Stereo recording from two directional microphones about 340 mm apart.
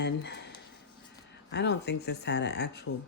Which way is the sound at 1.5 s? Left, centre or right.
Left.